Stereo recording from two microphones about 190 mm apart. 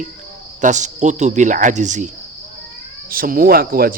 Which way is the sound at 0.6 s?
40° right (ahead or behind).